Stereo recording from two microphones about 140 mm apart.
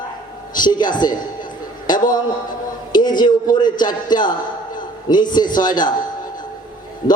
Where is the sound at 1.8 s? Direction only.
30° left (ahead or behind).